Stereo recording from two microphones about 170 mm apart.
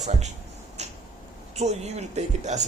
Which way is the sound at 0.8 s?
40° right (ahead or behind).